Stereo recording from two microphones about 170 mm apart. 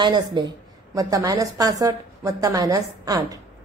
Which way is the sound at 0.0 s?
25° right (ahead or behind).